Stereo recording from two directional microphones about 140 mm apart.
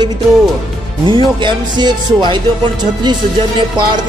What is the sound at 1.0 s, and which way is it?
Speech, 35° right (ahead or behind).